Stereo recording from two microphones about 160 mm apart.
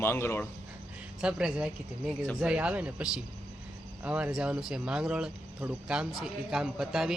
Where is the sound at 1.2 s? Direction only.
5° right (ahead or behind).